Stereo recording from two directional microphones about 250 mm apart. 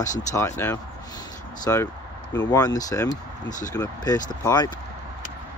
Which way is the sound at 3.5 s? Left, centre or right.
Left.